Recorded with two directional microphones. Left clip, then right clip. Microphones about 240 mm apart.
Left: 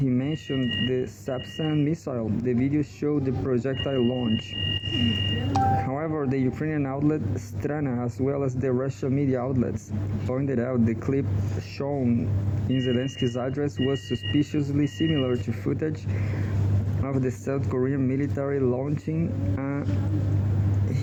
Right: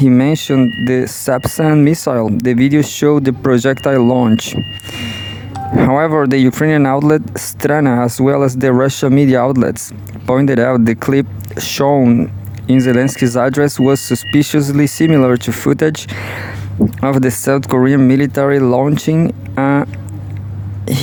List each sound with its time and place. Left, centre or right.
0.1 s speech: right
5.8 s speech: right